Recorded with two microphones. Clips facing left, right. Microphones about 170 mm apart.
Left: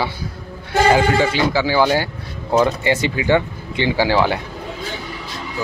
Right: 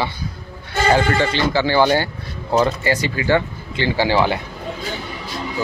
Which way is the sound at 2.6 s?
20° left (ahead or behind).